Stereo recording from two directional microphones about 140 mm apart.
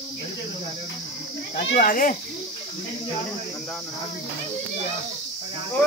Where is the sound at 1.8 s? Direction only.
75° left (ahead or behind).